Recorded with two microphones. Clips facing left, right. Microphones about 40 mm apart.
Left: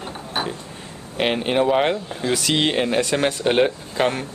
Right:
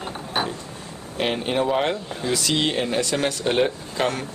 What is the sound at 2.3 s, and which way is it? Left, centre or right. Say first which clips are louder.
Speech: left 3 dB; left.